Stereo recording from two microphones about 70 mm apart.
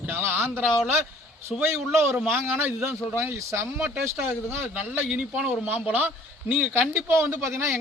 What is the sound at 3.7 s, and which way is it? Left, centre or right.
Speech, right.